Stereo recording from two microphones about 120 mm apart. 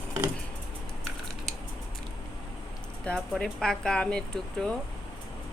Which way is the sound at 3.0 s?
Centre (ahead or behind).